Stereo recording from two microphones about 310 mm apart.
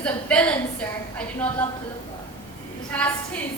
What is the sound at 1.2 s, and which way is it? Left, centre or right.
Speech, centre.